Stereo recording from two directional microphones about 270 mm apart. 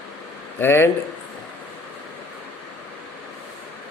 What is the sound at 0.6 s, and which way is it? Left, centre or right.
Speech, centre.